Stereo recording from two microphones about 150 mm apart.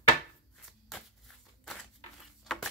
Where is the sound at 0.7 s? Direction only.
Centre (ahead or behind).